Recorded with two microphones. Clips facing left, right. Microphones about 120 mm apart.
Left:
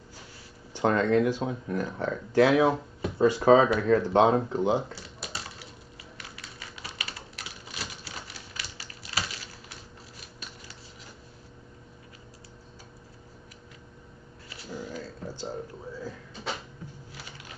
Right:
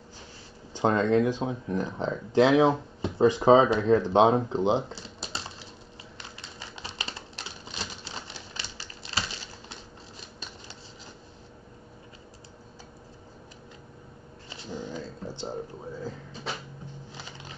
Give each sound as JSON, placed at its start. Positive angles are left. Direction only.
{"t": 0.7, "sound": "speech", "side_deg": -20}
{"t": 4.5, "sound": "typing", "side_deg": -20}
{"t": 6.1, "sound": "typewriter", "side_deg": -25}
{"t": 14.5, "sound": "a sound", "side_deg": -25}
{"t": 17.1, "sound": "music", "side_deg": -25}